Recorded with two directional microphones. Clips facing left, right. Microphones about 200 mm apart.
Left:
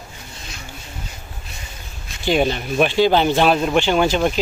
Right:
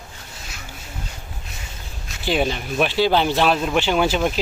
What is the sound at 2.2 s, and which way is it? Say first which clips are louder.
Speech: left 3 dB; centre (ahead or behind).